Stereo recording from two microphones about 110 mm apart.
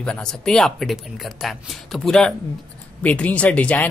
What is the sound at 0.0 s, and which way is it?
Speech, 5° left (ahead or behind).